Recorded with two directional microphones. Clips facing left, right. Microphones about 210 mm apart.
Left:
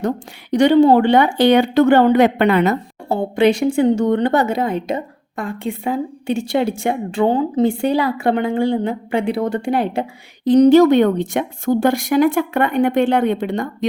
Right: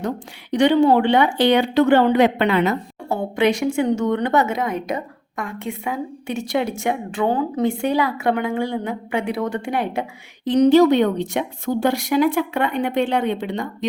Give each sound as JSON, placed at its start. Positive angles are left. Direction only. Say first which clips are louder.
{"t": 0.5, "sound": "speech", "louder": "left 4 dB", "side_deg": 40}